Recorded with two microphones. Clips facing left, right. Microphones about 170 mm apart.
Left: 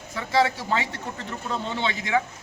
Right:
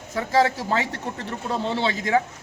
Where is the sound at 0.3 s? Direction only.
40° right (ahead or behind).